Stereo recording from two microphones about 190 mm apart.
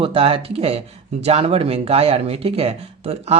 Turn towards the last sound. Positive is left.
turn(degrees=-35)  # may be behind; listen again after turning